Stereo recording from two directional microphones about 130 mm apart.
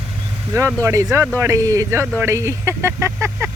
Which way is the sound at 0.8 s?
20° right (ahead or behind).